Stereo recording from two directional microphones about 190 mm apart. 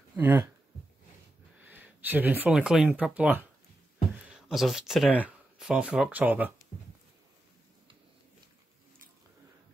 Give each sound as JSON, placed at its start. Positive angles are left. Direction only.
{"t": 0.1, "sound": "speech", "side_deg": -10}
{"t": 1.6, "sound": "speech", "side_deg": -10}
{"t": 4.5, "sound": "speech", "side_deg": 0}